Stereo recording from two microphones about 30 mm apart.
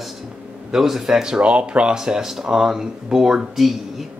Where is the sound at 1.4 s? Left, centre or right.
Right.